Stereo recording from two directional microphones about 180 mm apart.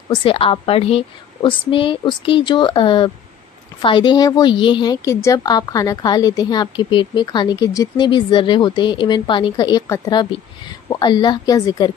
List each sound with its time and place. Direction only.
0.1 s a woman's voice: 30° left (ahead or behind)